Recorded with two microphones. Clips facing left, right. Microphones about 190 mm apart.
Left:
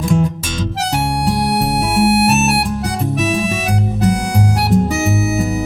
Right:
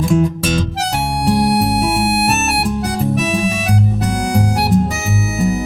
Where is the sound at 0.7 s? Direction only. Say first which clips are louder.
Left 1 dB; centre (ahead or behind).